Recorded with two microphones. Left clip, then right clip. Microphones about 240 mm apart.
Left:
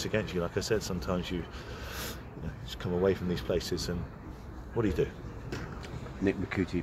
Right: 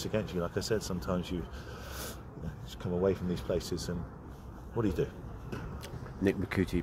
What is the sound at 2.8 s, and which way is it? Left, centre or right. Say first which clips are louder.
Speech: left 2 dB; centre.